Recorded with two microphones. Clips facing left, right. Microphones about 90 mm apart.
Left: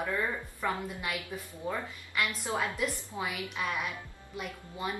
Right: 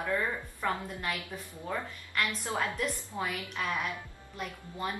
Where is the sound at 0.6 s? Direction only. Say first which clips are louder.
Right 1 dB; 5° left (ahead or behind).